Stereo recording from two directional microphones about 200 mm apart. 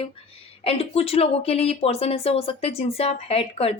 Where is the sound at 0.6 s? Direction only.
30° left (ahead or behind).